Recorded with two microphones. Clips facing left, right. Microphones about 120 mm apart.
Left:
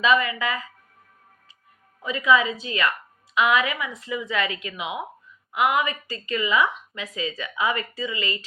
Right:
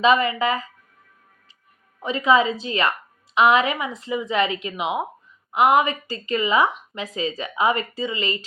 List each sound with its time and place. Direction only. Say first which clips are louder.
0.0 s a woman's voice: right 3 dB; 30° right (ahead or behind)
2.0 s a woman's voice: right 2 dB; 30° right (ahead or behind)